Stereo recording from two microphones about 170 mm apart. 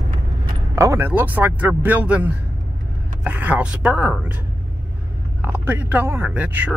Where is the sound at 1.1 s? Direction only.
10° right (ahead or behind).